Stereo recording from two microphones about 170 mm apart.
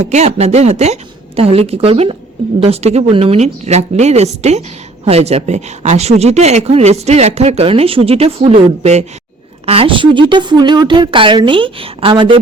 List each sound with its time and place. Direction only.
0.0 s a woman's voice: 40° right (ahead or behind)